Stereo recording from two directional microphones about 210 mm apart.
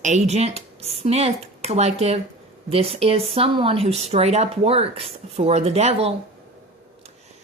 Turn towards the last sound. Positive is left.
turn(degrees=-30)  # may be behind; listen again after turning